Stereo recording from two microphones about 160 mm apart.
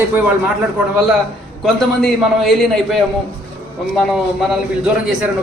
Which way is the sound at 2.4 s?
Centre (ahead or behind).